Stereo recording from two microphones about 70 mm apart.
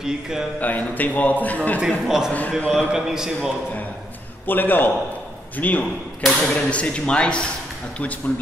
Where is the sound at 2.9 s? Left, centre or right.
Centre.